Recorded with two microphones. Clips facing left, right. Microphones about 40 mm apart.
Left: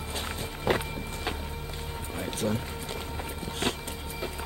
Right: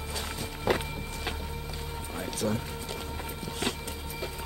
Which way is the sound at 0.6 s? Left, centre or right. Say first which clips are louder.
Left 1 dB; centre.